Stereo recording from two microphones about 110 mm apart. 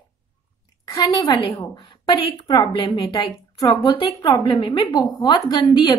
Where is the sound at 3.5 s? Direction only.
35° left (ahead or behind).